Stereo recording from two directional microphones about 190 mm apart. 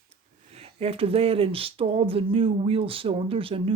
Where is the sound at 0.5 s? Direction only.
30° right (ahead or behind).